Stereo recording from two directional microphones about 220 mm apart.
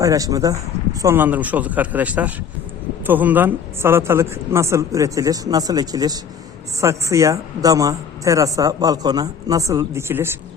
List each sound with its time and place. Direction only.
0.0 s a woman's voice: 15° right (ahead or behind)